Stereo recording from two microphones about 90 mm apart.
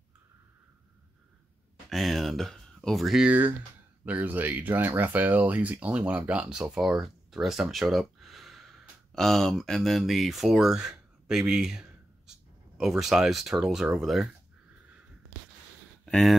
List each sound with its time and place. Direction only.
1.9 s speech: centre (ahead or behind)
3.3 s speech: 20° right (ahead or behind)
16.1 s speech: centre (ahead or behind)